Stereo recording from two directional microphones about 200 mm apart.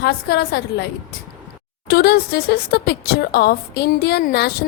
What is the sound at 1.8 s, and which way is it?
Speech, 50° left (ahead or behind).